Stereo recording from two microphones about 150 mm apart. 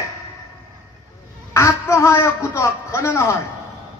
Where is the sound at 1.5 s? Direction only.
20° left (ahead or behind).